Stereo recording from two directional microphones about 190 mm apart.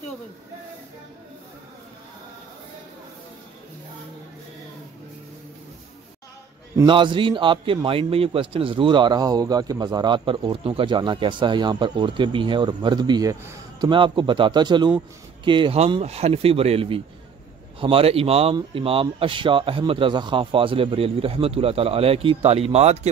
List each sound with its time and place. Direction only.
6.9 s a man's voice: 25° right (ahead or behind)